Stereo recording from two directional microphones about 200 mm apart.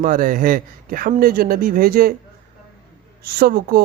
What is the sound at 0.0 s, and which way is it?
Speech, 40° right (ahead or behind).